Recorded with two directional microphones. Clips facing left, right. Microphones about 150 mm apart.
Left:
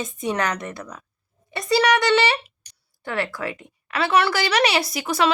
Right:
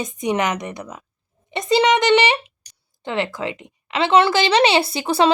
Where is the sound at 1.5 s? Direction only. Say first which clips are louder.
Right 3 dB; 20° right (ahead or behind).